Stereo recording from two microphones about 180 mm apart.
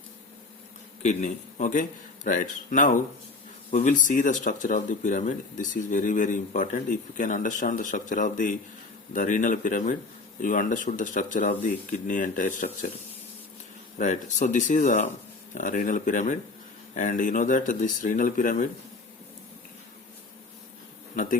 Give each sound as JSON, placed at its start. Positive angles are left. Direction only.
{"t": 1.0, "sound": "speech", "side_deg": 40}
{"t": 14.0, "sound": "speech", "side_deg": 40}